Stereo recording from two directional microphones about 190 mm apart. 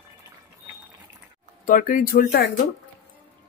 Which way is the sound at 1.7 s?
45° left (ahead or behind).